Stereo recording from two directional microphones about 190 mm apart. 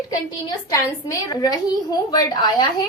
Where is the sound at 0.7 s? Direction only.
15° left (ahead or behind).